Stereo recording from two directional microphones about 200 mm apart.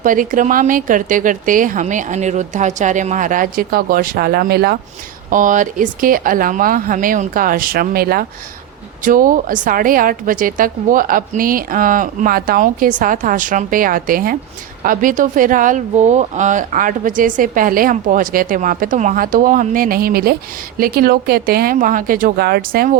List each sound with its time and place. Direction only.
0.0 s speech: 40° right (ahead or behind)
5.3 s a woman's voice: 40° right (ahead or behind)